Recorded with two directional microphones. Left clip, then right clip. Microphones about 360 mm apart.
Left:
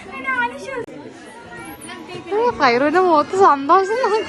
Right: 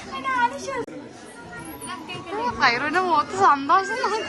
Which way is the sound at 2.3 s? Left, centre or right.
Centre.